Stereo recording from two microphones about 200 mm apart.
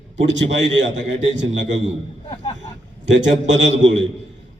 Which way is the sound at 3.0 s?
65° right (ahead or behind).